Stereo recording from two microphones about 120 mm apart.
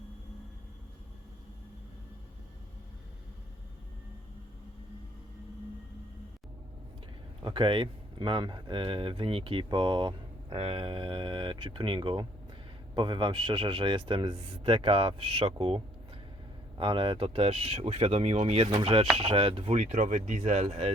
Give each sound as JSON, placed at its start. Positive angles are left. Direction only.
{"t": 7.4, "sound": "speech", "side_deg": -45}
{"t": 10.6, "sound": "speech", "side_deg": -50}
{"t": 19.7, "sound": "speech", "side_deg": -90}